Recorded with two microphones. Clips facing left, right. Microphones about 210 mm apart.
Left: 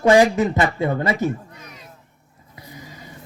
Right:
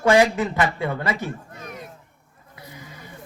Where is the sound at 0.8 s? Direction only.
40° left (ahead or behind).